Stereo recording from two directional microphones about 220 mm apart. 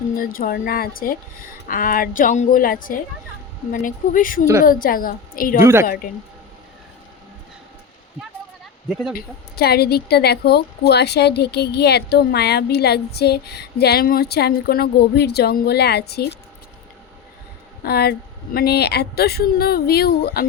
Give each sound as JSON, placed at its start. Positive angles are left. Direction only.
{"t": 0.2, "sound": "speech", "side_deg": 40}
{"t": 9.1, "sound": "a woman's voice", "side_deg": 45}
{"t": 17.8, "sound": "a woman's voice", "side_deg": 45}